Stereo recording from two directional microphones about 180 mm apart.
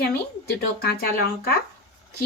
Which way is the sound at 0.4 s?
60° left (ahead or behind).